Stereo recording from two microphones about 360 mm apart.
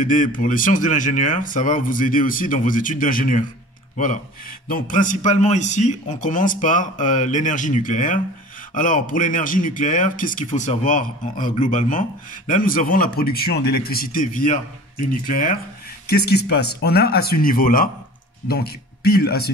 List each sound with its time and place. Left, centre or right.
0.0 s a man's voice: left